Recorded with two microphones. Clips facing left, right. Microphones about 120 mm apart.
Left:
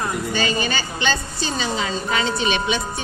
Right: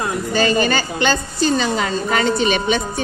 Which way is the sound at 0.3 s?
45° right (ahead or behind).